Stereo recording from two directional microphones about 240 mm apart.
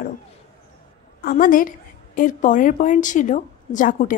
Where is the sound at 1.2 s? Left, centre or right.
Left.